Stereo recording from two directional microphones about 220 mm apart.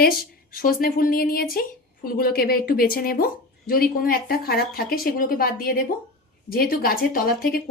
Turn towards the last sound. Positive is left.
turn(degrees=40)  # may be behind; listen again after turning